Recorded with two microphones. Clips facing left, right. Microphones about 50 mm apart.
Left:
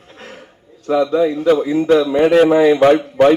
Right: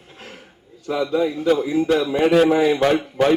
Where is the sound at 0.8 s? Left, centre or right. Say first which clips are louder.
Left 6 dB; centre.